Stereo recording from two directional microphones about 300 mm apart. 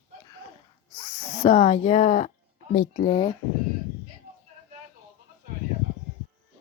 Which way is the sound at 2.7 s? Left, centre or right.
Left.